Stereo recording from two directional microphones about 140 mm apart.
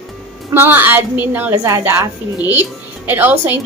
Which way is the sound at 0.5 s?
15° right (ahead or behind).